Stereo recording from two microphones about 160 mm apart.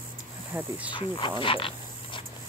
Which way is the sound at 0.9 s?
30° left (ahead or behind).